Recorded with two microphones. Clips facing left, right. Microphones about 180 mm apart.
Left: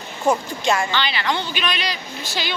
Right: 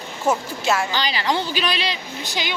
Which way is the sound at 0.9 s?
40° right (ahead or behind).